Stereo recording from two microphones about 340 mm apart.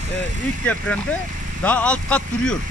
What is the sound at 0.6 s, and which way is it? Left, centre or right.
Speech, centre.